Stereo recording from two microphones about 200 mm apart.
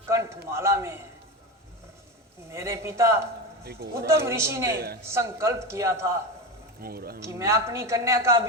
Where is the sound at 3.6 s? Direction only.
50° right (ahead or behind).